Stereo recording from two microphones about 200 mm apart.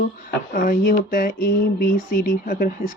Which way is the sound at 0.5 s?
40° left (ahead or behind).